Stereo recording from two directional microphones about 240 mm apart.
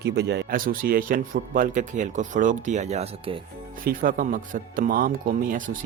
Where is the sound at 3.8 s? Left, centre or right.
Right.